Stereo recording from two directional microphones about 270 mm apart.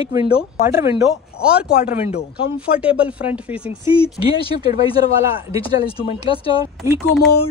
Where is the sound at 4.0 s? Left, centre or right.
Left.